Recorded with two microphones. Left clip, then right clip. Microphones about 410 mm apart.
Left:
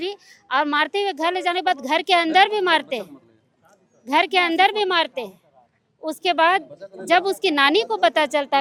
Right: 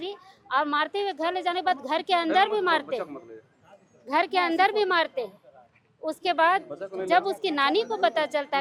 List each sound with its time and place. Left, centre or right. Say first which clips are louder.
0.0 s a woman's voice: left 7 dB; left